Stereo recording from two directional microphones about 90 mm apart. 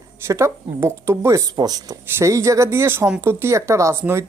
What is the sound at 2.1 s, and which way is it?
Speech, 35° right (ahead or behind).